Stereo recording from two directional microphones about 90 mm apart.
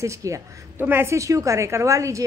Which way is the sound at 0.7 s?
25° right (ahead or behind).